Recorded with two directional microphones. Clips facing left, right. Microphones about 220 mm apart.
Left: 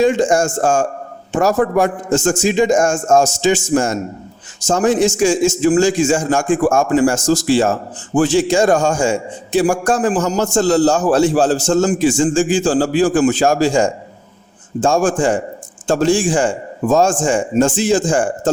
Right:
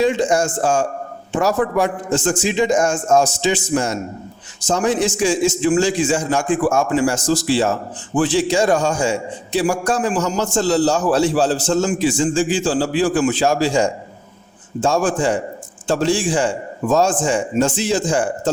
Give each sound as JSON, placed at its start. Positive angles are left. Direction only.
{"t": 0.0, "sound": "a man's voice", "side_deg": 45}